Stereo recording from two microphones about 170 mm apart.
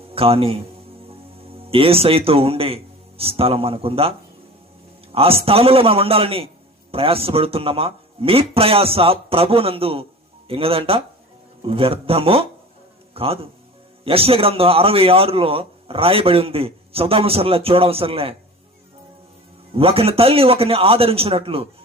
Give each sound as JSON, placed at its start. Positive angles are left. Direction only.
{"t": 0.1, "sound": "a man's voice", "side_deg": -35}
{"t": 1.7, "sound": "a man's voice", "side_deg": -35}
{"t": 5.1, "sound": "a man's voice", "side_deg": -35}
{"t": 19.7, "sound": "a man's voice", "side_deg": -35}